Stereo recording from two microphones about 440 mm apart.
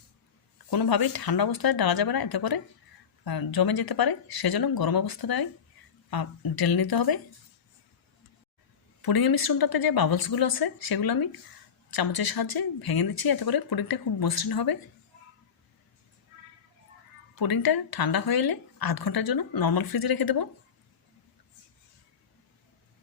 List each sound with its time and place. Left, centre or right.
0.7 s speech: left
9.0 s speech: left
17.4 s speech: left